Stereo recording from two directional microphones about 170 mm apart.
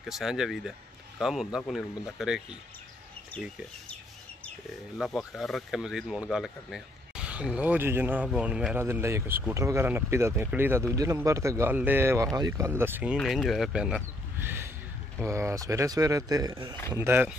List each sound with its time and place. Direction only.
0.1 s speech: centre (ahead or behind)
4.9 s speech: centre (ahead or behind)